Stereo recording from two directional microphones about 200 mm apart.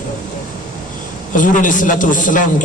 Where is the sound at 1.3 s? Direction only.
40° left (ahead or behind).